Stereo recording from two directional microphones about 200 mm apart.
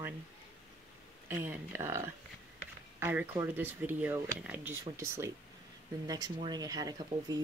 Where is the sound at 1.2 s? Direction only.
10° right (ahead or behind).